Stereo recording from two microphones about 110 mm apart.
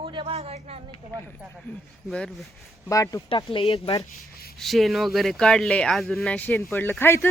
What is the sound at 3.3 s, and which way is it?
Speech, 50° left (ahead or behind).